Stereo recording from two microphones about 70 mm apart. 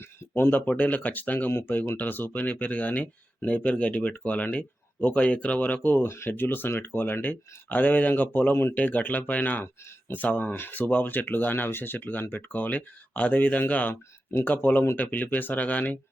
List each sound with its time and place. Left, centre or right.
0.0 s speech: left
6.1 s speech: left